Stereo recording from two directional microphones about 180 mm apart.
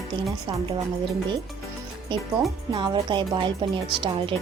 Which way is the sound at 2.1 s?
25° right (ahead or behind).